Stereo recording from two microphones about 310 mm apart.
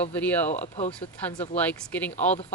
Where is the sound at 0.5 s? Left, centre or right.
Left.